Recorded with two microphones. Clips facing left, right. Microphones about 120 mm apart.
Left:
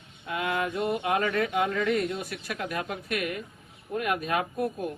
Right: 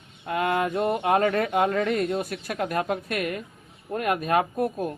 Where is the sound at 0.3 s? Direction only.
50° right (ahead or behind).